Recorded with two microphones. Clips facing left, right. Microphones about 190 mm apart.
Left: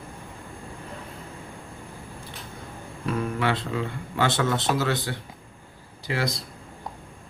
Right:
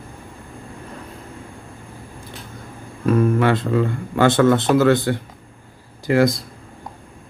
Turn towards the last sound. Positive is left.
turn(degrees=-45)  # may be behind; listen again after turning